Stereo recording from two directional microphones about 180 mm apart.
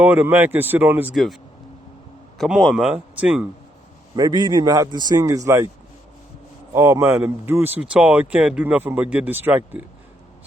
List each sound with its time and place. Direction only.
0.0 s speech: 10° right (ahead or behind)
1.1 s a man's voice: centre (ahead or behind)
2.4 s a man's voice: centre (ahead or behind)
4.1 s a man's voice: 20° right (ahead or behind)
6.7 s speech: 15° right (ahead or behind)